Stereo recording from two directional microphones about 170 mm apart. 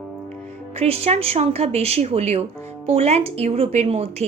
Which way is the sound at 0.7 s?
35° right (ahead or behind).